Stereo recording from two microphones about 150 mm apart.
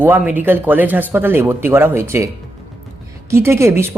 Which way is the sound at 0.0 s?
10° right (ahead or behind).